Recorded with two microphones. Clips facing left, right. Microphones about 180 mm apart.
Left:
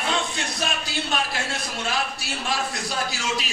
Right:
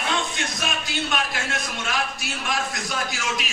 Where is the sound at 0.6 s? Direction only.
30° left (ahead or behind).